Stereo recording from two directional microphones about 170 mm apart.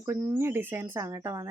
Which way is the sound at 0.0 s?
15° right (ahead or behind).